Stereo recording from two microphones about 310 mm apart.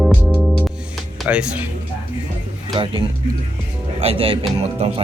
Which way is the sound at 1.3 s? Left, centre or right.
Centre.